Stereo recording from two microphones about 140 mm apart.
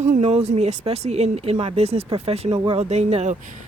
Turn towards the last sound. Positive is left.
turn(degrees=-50)  # may be behind; listen again after turning